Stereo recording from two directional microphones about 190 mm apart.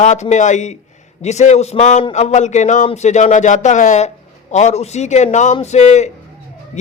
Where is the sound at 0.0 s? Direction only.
40° left (ahead or behind).